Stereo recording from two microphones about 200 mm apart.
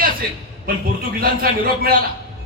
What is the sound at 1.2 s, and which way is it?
Speech, 50° right (ahead or behind).